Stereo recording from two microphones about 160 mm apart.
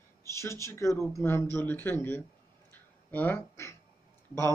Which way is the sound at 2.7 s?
10° left (ahead or behind).